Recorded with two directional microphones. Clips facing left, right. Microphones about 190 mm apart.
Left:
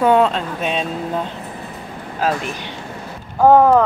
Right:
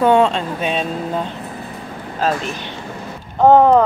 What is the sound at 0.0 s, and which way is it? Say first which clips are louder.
Speech: right 1 dB; 5° left (ahead or behind).